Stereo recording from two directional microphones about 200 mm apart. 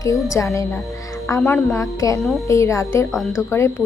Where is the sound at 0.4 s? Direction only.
10° left (ahead or behind).